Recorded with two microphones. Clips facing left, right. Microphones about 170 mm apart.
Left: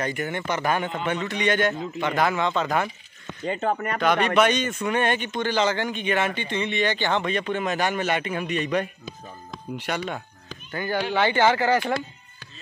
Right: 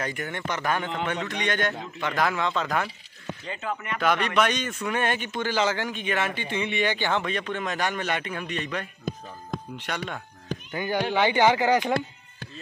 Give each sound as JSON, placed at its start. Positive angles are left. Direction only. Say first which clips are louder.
{"t": 0.0, "sound": "speech", "louder": "left 4 dB", "side_deg": 0}
{"t": 3.4, "sound": "speech", "louder": "left 8 dB", "side_deg": 40}
{"t": 4.0, "sound": "speech", "louder": "left 3 dB", "side_deg": 0}
{"t": 9.1, "sound": "a sound", "louder": "right 7 dB", "side_deg": -50}
{"t": 9.8, "sound": "speech", "louder": "left 7 dB", "side_deg": 5}
{"t": 10.7, "sound": "speech", "louder": "left 1 dB", "side_deg": -15}